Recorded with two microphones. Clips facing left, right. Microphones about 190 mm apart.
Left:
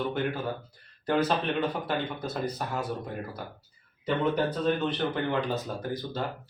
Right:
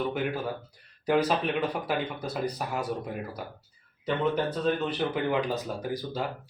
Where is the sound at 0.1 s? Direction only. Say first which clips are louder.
Even; 10° right (ahead or behind).